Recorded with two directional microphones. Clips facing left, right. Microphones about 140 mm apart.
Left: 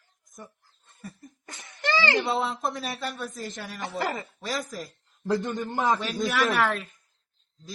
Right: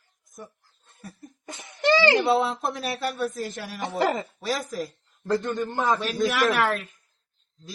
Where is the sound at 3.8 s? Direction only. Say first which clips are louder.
Right 6 dB; 20° right (ahead or behind).